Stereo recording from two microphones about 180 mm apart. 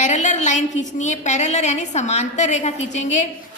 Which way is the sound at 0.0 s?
40° left (ahead or behind).